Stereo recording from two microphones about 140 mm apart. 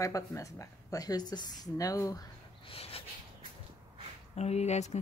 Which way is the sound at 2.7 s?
45° left (ahead or behind).